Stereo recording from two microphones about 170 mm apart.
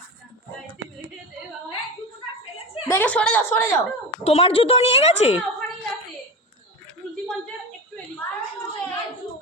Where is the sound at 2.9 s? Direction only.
10° left (ahead or behind).